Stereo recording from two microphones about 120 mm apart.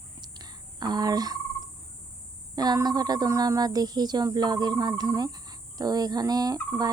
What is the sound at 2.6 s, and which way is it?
Speech, 35° right (ahead or behind).